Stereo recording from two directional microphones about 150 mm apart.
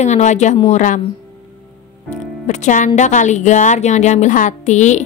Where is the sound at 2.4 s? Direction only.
50° left (ahead or behind).